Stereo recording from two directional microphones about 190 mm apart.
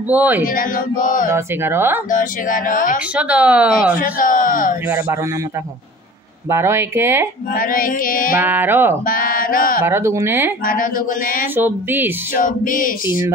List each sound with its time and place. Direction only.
0.1 s speech: 10° right (ahead or behind)
0.4 s speech: 45° left (ahead or behind)
1.3 s speech: 10° right (ahead or behind)
2.0 s speech: 45° left (ahead or behind)
3.2 s speech: 5° right (ahead or behind)
4.0 s speech: 45° left (ahead or behind)
6.5 s speech: 15° right (ahead or behind)
7.5 s speech: 50° left (ahead or behind)
8.4 s speech: 10° right (ahead or behind)
9.0 s speech: 50° left (ahead or behind)
9.8 s speech: 15° right (ahead or behind)
10.6 s speech: 45° left (ahead or behind)
11.5 s speech: 10° right (ahead or behind)
12.4 s speech: 45° left (ahead or behind)